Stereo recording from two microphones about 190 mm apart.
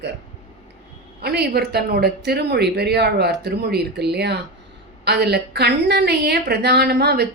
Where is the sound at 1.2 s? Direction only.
60° right (ahead or behind).